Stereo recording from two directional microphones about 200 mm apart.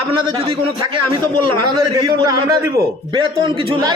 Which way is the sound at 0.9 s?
25° right (ahead or behind).